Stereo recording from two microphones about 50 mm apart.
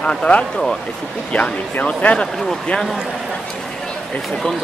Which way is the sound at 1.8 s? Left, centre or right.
Left.